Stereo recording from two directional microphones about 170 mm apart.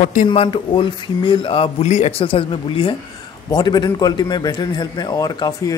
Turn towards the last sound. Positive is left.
turn(degrees=20)  # may be behind; listen again after turning